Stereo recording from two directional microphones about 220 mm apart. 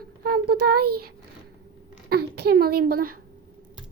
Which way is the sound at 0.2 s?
45° right (ahead or behind).